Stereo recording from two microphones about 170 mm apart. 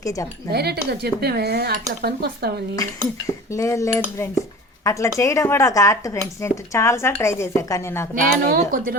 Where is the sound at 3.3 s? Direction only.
20° left (ahead or behind).